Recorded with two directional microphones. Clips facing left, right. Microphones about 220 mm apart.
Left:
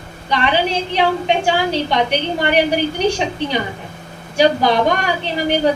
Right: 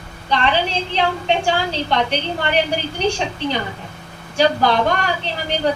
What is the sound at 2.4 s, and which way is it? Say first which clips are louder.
A woman's voice: left 5 dB; 15° left (ahead or behind).